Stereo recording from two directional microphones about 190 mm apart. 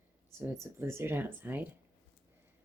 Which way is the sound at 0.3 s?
15° right (ahead or behind).